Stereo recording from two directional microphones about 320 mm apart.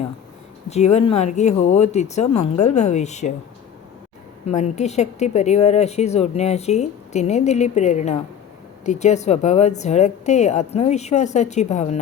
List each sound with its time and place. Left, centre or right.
0.9 s speech: centre
4.4 s speech: left